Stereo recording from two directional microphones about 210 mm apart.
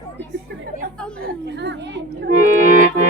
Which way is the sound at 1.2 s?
55° right (ahead or behind).